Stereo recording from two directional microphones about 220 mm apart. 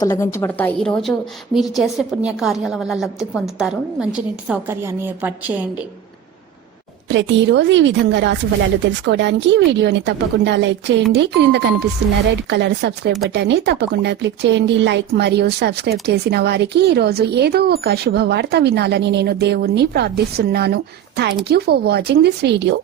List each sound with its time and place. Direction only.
0.0 s a woman's voice: 15° left (ahead or behind); by 5.6 s 10° right (ahead or behind)
7.1 s speech: 55° right (ahead or behind)